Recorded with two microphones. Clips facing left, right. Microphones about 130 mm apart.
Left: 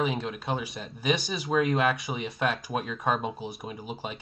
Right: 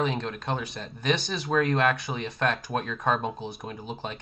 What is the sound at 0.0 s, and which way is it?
Speech, 5° left (ahead or behind).